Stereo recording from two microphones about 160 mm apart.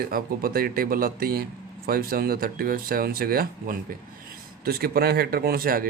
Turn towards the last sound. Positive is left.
turn(degrees=-65)  # may be behind; listen again after turning